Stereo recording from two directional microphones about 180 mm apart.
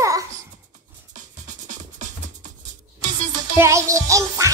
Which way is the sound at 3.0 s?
45° right (ahead or behind).